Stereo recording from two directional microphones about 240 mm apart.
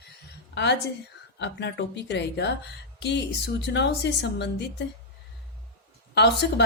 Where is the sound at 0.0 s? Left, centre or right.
Left.